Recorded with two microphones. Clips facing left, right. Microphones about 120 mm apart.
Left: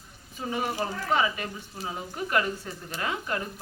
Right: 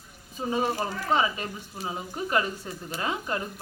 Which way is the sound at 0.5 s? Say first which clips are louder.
Right 2 dB; 25° right (ahead or behind).